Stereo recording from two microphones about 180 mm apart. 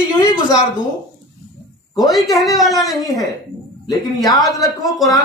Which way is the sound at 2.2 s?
20° left (ahead or behind).